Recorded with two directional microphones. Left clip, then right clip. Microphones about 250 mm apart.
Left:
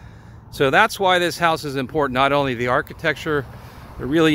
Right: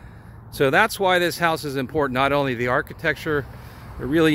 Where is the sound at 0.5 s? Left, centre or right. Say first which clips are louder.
Left 2 dB; centre.